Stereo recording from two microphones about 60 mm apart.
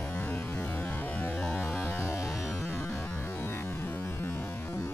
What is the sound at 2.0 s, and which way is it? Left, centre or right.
Music, left.